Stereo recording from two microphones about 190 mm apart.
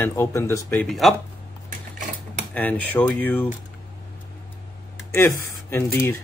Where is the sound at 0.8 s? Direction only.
Centre (ahead or behind).